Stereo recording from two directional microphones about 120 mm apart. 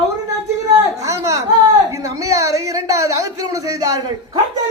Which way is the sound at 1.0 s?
25° right (ahead or behind).